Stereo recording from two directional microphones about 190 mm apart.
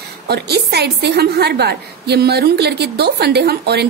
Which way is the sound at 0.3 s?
60° right (ahead or behind).